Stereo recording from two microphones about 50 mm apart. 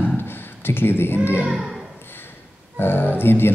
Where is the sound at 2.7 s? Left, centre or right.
Left.